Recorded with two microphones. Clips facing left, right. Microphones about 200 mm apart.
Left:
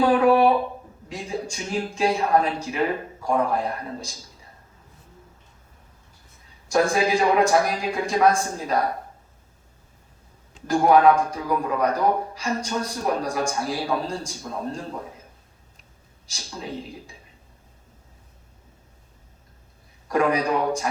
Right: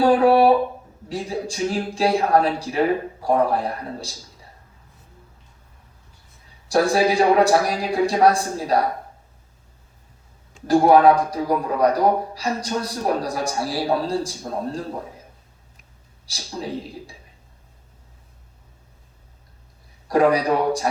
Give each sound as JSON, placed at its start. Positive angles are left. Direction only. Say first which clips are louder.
{"t": 0.0, "sound": "a sound", "louder": "right 2 dB", "side_deg": -35}
{"t": 1.0, "sound": "a man's voice", "louder": "right 4 dB", "side_deg": -35}
{"t": 6.7, "sound": "a man's voice", "louder": "right 2 dB", "side_deg": -35}
{"t": 10.7, "sound": "a man's voice", "louder": "right 3 dB", "side_deg": -35}
{"t": 20.1, "sound": "a man's voice", "louder": "right 4 dB", "side_deg": -35}